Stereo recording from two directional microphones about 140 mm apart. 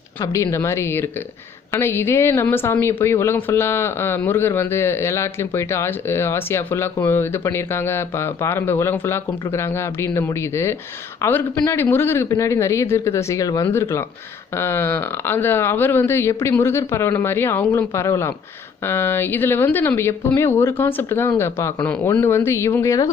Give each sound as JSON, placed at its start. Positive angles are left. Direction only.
{"t": 0.3, "sound": "a woman's voice", "side_deg": 20}